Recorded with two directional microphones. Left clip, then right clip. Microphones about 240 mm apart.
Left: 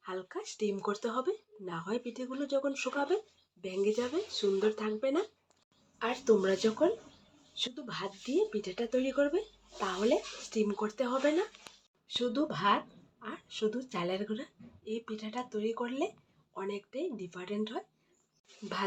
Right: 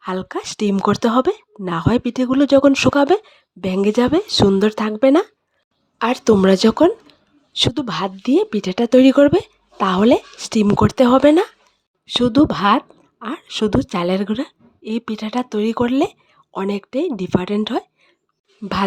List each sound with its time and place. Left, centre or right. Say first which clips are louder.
0.0 s speech: right 15 dB; right